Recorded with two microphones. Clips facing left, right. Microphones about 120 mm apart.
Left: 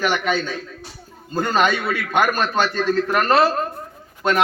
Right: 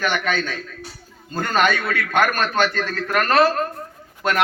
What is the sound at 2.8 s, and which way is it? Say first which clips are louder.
Speech: left 4 dB; 20° left (ahead or behind).